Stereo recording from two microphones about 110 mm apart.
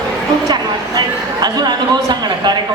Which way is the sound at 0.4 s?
40° right (ahead or behind).